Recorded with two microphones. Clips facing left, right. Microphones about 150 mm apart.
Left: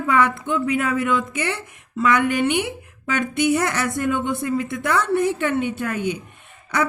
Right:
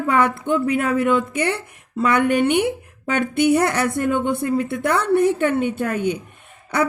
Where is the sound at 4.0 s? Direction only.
45° right (ahead or behind).